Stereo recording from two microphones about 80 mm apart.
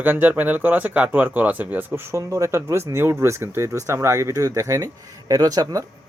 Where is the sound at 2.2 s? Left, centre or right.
Right.